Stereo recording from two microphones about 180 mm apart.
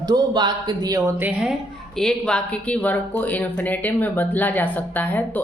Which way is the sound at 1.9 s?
5° left (ahead or behind).